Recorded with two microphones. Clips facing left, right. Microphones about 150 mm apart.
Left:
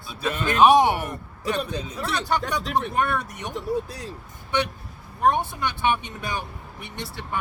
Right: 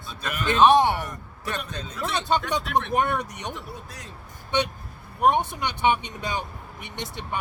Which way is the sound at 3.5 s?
35° left (ahead or behind).